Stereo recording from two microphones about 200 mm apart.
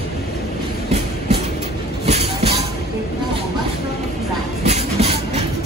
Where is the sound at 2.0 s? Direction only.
35° right (ahead or behind).